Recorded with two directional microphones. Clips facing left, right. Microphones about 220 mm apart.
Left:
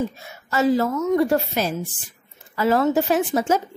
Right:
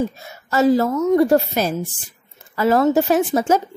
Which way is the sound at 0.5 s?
40° right (ahead or behind).